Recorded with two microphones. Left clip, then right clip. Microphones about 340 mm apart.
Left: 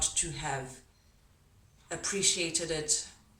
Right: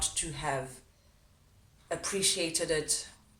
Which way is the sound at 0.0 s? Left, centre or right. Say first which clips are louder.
Even; centre.